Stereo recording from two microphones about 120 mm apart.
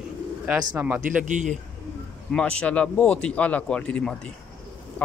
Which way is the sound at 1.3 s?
90° right.